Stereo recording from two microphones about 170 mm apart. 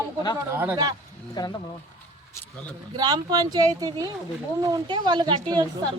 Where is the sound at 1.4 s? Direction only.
25° left (ahead or behind).